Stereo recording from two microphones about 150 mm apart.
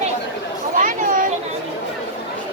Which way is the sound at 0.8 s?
60° right (ahead or behind).